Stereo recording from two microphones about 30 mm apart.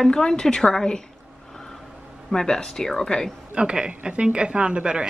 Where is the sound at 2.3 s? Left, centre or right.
Centre.